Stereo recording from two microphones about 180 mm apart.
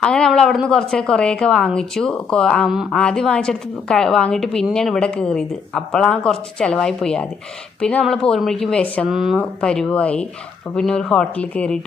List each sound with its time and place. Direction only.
0.0 s a woman's voice: 5° left (ahead or behind)